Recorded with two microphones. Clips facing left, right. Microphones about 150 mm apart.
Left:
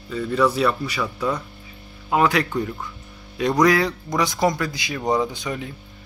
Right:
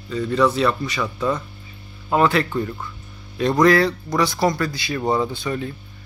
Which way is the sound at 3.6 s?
15° left (ahead or behind).